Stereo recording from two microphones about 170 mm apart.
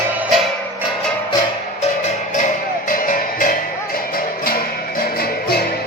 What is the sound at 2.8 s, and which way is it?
Music, 50° left (ahead or behind).